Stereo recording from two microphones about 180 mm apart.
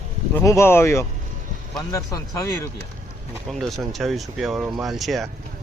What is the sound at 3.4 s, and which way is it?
Speech, centre (ahead or behind).